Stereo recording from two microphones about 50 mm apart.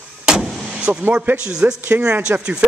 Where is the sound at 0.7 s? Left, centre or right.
Right.